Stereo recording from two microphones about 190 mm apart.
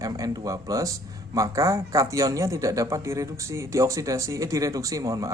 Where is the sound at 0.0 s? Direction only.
20° right (ahead or behind).